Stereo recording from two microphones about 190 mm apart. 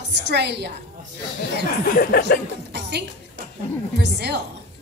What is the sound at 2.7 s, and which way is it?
Music, 60° right (ahead or behind).